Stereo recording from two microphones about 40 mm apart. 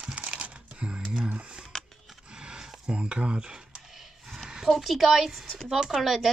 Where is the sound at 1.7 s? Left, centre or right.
Centre.